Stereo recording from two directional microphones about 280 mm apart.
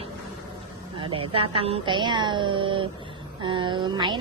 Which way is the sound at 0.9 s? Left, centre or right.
Centre.